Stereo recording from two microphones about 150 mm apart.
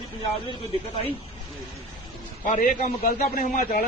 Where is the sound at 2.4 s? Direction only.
60° left (ahead or behind).